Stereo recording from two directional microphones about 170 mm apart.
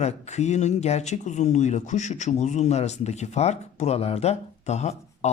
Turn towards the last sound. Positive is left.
turn(degrees=40)  # may be behind; listen again after turning